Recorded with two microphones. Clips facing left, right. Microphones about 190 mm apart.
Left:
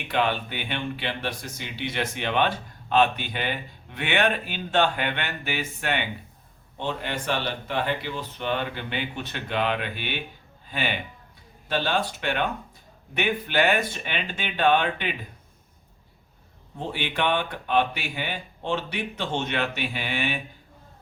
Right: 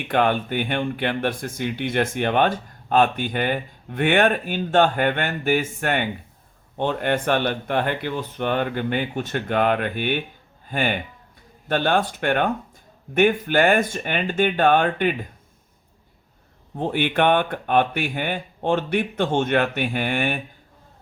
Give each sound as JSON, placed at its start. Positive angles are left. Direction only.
{"t": 0.1, "sound": "speech", "side_deg": -50}
{"t": 16.7, "sound": "speech", "side_deg": -55}